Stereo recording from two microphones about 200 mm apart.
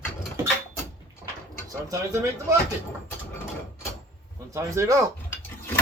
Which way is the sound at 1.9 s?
15° right (ahead or behind).